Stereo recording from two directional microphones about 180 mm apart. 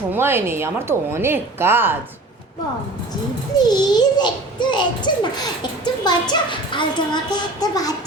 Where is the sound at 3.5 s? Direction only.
20° left (ahead or behind).